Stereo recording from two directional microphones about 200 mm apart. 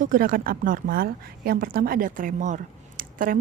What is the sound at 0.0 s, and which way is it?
A woman's voice, 45° right (ahead or behind).